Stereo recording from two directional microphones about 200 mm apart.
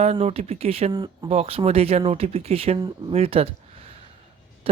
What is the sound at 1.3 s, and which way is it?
Speech, 30° right (ahead or behind).